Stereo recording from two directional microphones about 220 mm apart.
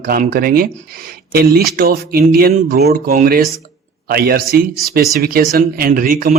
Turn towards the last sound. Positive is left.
turn(degrees=-40)  # may be behind; listen again after turning